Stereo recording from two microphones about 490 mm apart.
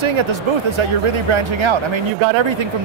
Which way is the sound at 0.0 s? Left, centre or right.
Right.